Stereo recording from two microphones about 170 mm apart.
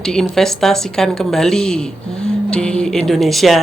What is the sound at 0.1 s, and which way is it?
Speech, 5° left (ahead or behind).